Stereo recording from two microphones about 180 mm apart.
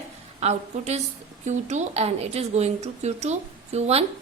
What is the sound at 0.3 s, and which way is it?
A woman's voice, 35° right (ahead or behind).